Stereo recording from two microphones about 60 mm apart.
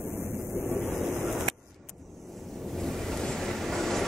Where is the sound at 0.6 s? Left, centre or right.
Right.